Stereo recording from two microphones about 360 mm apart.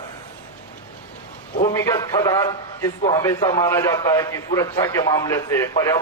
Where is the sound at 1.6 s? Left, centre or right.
Centre.